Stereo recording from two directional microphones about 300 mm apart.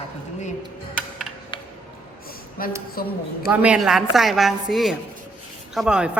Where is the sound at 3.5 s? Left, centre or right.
Centre.